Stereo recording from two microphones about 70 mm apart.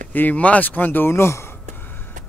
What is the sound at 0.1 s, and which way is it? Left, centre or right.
Speech, left.